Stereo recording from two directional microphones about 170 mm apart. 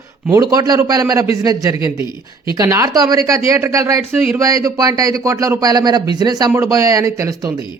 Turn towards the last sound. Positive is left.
turn(degrees=-20)  # may be behind; listen again after turning